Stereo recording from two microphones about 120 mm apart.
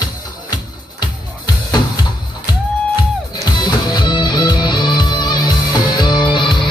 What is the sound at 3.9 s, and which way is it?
Music, 40° left (ahead or behind).